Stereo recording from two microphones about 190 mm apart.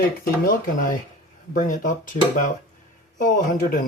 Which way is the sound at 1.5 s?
45° left (ahead or behind).